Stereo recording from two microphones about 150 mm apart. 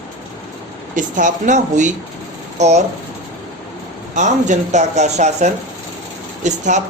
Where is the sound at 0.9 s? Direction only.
60° right (ahead or behind).